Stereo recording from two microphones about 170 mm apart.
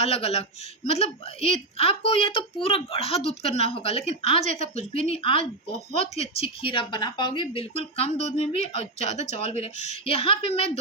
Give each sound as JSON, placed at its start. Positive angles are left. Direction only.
{"t": 0.0, "sound": "speech", "side_deg": 35}